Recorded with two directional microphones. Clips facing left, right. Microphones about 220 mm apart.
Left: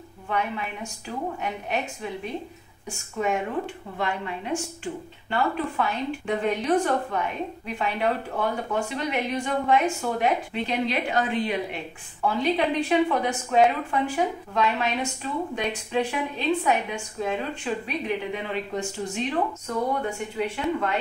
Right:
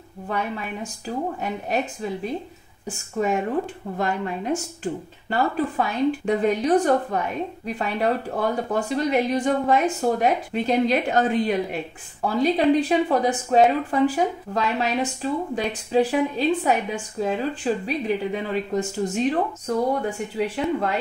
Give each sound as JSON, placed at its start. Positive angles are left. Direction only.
{"t": 0.3, "sound": "speech", "side_deg": -40}
{"t": 3.2, "sound": "a woman's voice", "side_deg": -40}